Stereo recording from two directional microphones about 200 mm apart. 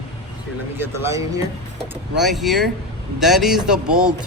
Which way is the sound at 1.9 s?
Centre (ahead or behind).